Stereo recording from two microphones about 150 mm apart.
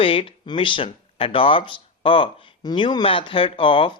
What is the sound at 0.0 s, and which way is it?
Speech, 35° left (ahead or behind).